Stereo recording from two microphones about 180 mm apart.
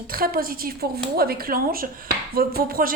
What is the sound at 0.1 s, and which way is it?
A woman's voice, 55° right (ahead or behind).